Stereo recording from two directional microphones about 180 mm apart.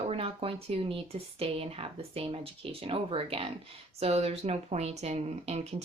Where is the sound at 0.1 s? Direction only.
30° right (ahead or behind).